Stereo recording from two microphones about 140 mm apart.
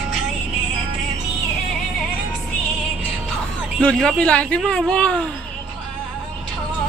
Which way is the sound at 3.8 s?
5° left (ahead or behind).